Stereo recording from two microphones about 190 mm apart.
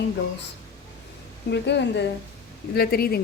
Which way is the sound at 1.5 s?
65° left (ahead or behind).